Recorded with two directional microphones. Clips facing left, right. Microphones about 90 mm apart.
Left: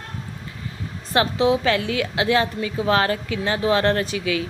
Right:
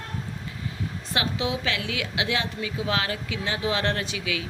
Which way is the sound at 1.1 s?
40° left (ahead or behind).